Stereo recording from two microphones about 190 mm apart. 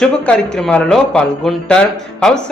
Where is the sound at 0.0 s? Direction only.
5° left (ahead or behind).